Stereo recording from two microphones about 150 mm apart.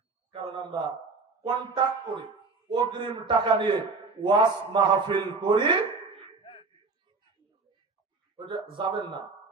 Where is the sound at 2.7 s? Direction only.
30° right (ahead or behind).